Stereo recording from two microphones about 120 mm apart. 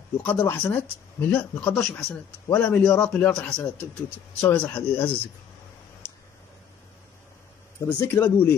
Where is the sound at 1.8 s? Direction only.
Centre (ahead or behind).